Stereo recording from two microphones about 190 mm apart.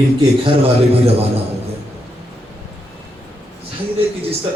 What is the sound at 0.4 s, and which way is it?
Speech, 30° right (ahead or behind).